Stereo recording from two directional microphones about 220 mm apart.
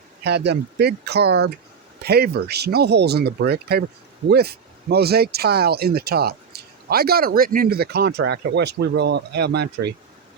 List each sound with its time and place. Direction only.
0.3 s speech: 50° right (ahead or behind)